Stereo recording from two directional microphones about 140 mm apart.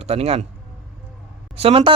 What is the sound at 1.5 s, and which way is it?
Speech, 45° right (ahead or behind).